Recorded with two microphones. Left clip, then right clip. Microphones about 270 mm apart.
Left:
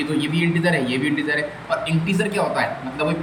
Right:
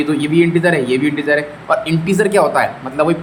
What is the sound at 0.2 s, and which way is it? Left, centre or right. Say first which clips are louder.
A man's voice: right 10 dB; centre.